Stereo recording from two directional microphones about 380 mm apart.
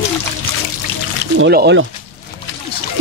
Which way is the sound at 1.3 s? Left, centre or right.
Right.